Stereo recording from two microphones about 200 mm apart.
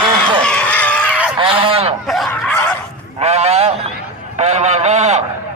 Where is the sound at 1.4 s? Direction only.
25° right (ahead or behind).